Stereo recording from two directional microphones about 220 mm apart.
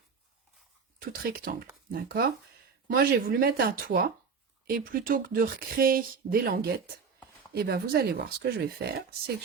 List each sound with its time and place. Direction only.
1.1 s speech: 40° right (ahead or behind)